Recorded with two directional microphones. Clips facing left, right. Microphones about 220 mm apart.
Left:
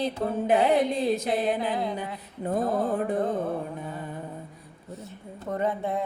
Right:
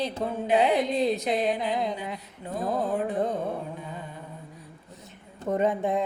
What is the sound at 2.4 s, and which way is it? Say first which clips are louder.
Mantra: left 7 dB; 50° left (ahead or behind).